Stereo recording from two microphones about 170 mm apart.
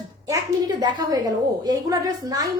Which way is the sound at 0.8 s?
25° right (ahead or behind).